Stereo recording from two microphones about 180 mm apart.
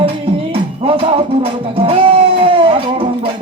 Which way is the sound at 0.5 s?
30° right (ahead or behind).